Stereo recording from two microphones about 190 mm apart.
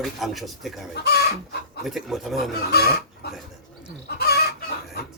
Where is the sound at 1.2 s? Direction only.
60° left (ahead or behind).